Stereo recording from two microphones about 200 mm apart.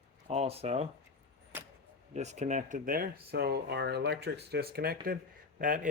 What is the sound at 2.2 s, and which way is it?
Speech, 35° right (ahead or behind).